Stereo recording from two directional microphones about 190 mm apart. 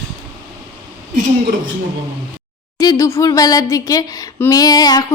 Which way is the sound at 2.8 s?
15° left (ahead or behind).